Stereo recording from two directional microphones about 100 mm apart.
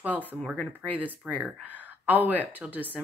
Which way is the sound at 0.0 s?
15° right (ahead or behind).